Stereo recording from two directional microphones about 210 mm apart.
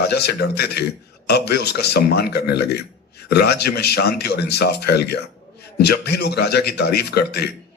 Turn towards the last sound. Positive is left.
turn(degrees=50)  # may be behind; listen again after turning